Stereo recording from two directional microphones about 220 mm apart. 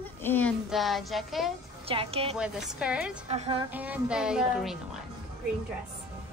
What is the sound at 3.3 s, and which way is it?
Speech, 30° right (ahead or behind).